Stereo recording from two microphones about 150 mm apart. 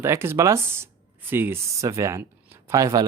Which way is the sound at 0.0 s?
15° right (ahead or behind).